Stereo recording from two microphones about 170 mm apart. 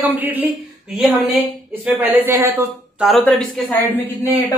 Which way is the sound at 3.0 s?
5° left (ahead or behind).